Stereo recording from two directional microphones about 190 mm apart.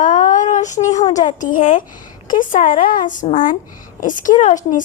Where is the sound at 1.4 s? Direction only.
45° left (ahead or behind).